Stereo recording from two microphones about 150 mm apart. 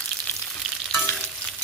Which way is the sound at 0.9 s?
10° left (ahead or behind).